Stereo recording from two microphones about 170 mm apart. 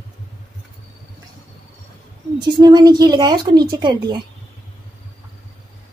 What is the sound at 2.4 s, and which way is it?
A woman's voice, 25° right (ahead or behind).